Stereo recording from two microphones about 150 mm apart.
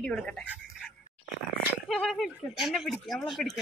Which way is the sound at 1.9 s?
Centre (ahead or behind).